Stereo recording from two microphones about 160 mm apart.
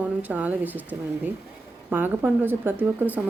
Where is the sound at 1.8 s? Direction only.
10° right (ahead or behind).